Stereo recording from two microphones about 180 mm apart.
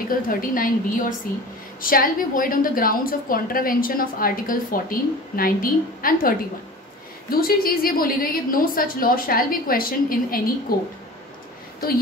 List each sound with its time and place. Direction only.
0.3 s a woman's voice: 50° left (ahead or behind)